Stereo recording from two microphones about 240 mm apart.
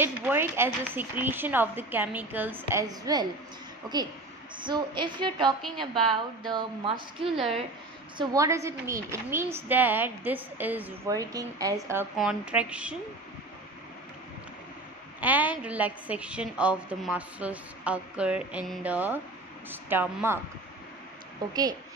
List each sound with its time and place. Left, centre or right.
0.0 s a woman's voice: centre
4.6 s a woman's voice: centre
5.9 s a woman's voice: centre
6.5 s a woman's voice: right; by 12.9 s centre
15.1 s a woman's voice: centre
21.4 s a woman's voice: centre